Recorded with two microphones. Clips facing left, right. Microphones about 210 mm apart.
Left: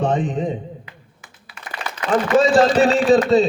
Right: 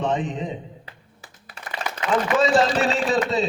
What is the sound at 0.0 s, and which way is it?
Speech, 45° left (ahead or behind).